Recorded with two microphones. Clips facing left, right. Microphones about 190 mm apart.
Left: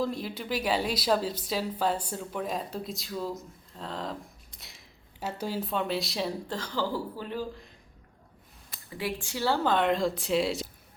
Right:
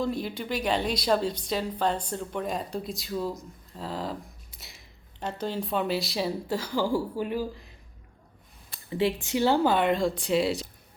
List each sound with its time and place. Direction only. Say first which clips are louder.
0.0 s a woman's voice: right 2 dB; centre (ahead or behind)
8.7 s speech: right 7 dB; 25° right (ahead or behind)
9.7 s a woman's voice: right 1 dB; 5° right (ahead or behind)